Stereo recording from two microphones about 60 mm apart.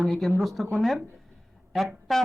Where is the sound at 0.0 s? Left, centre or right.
Centre.